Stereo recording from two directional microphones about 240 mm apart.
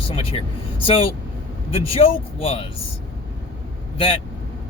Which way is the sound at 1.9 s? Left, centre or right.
Left.